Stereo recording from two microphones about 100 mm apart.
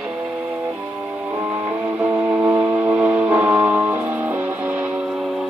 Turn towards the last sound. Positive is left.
turn(degrees=-5)  # may be behind; listen again after turning